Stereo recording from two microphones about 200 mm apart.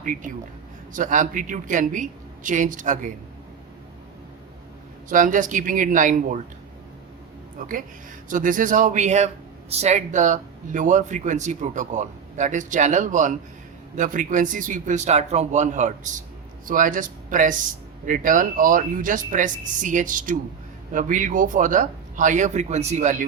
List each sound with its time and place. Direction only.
0.0 s a man's voice: 40° right (ahead or behind)
5.0 s a man's voice: 40° right (ahead or behind)
7.6 s a man's voice: 45° right (ahead or behind)